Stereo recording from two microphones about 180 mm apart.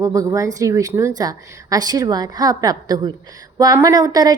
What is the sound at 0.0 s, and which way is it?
A woman's voice, 20° right (ahead or behind).